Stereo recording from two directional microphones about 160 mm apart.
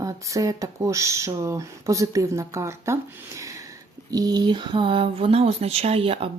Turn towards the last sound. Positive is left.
turn(degrees=-35)  # may be behind; listen again after turning